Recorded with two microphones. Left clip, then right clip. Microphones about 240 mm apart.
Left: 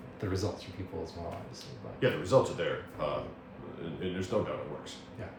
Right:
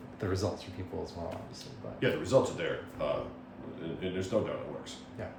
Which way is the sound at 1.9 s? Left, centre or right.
Centre.